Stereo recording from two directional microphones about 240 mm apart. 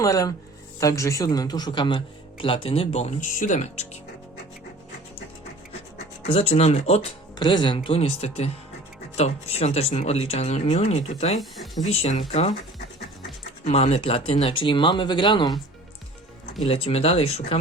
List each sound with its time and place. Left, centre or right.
0.0 s speech: centre
6.2 s speech: left
11.5 s speech: centre
11.9 s speech: left
13.7 s speech: left
16.6 s speech: left